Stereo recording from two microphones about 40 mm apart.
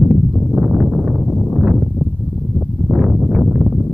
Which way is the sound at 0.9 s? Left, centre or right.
Right.